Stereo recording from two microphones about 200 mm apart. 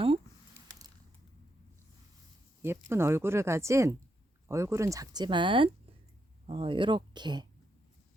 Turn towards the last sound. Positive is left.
turn(degrees=-20)  # may be behind; listen again after turning